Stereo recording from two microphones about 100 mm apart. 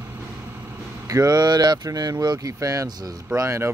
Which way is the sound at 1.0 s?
35° right (ahead or behind).